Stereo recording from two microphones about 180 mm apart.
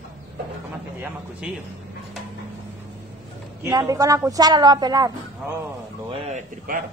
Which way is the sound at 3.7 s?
20° right (ahead or behind).